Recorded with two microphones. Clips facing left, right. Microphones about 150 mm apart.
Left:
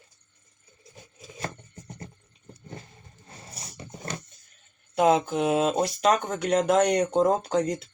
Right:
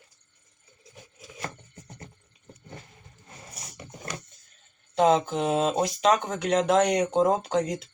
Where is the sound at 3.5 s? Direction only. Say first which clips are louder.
Left 2 dB; 30° left (ahead or behind).